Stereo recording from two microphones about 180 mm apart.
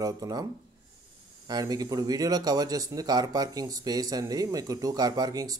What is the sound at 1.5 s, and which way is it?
Speech, 20° right (ahead or behind).